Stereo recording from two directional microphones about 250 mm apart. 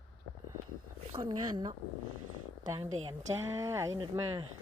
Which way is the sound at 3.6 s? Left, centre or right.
Centre.